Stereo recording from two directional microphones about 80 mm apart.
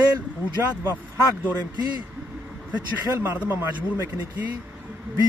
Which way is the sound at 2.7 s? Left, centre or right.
Right.